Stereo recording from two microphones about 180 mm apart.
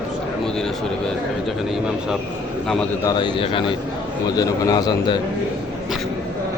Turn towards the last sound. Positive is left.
turn(degrees=20)  # may be behind; listen again after turning